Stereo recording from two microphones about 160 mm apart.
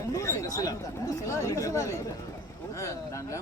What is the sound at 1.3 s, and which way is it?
Speech, 20° left (ahead or behind).